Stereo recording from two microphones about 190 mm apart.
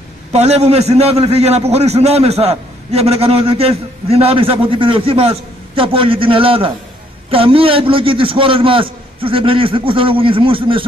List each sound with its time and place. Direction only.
0.3 s a man's voice: 35° right (ahead or behind)